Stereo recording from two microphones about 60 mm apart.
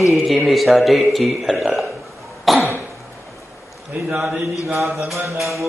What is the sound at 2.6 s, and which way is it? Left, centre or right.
Throat clearing, right.